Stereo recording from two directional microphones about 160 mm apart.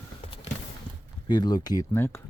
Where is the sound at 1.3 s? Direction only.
25° left (ahead or behind).